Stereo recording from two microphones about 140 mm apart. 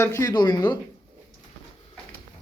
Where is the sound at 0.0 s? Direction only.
20° left (ahead or behind).